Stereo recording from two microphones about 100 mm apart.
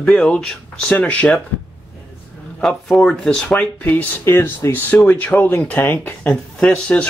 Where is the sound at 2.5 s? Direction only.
5° left (ahead or behind).